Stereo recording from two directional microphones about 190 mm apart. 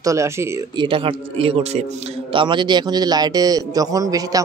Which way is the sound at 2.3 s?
25° right (ahead or behind).